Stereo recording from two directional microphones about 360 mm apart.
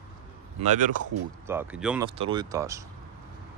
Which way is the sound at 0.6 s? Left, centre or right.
Right.